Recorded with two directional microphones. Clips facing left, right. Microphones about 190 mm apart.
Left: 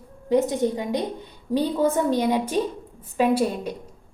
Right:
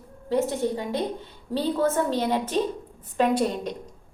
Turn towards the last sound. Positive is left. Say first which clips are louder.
# left 2 dB
turn(degrees=10)  # may be behind; listen again after turning